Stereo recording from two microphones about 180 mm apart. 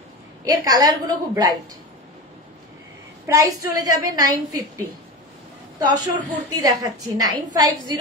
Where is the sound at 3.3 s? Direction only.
20° right (ahead or behind).